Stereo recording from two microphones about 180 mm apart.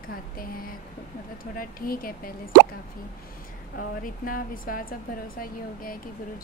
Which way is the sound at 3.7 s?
50° left (ahead or behind).